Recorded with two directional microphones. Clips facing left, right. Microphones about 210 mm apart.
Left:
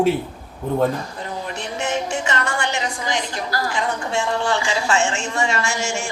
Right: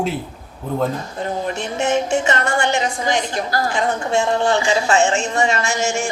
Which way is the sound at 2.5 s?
25° right (ahead or behind).